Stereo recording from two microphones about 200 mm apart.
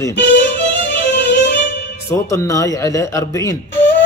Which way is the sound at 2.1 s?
15° left (ahead or behind).